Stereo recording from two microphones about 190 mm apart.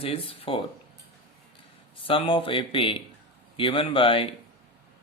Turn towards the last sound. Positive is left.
turn(degrees=30)  # may be behind; listen again after turning